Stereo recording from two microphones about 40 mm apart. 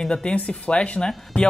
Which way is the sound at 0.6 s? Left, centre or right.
Left.